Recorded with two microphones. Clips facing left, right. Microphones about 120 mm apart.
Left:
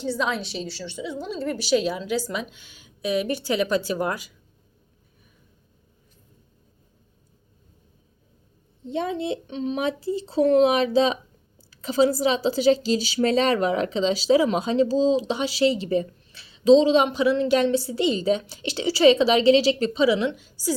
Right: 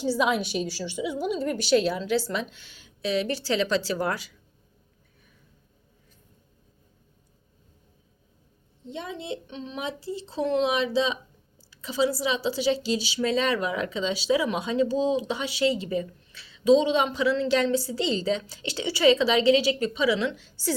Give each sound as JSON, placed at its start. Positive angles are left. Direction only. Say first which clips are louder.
{"t": 0.0, "sound": "a woman's voice", "louder": "right 2 dB", "side_deg": -10}
{"t": 8.9, "sound": "speech", "louder": "left 8 dB", "side_deg": 75}
{"t": 11.9, "sound": "a woman's voice", "louder": "left 5 dB", "side_deg": 45}